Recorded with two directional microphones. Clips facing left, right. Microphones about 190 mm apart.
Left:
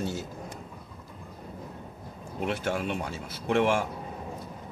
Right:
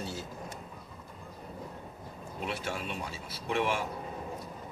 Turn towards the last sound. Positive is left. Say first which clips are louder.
# left 6 dB
turn(degrees=60)  # may be behind; listen again after turning